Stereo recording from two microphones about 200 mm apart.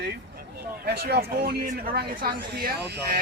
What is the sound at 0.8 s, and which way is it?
A woman's voice, 50° right (ahead or behind).